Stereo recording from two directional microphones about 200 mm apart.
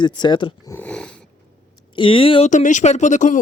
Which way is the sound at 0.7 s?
5° left (ahead or behind).